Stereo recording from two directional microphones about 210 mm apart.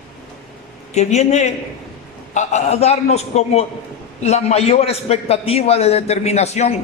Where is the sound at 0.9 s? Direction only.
30° left (ahead or behind).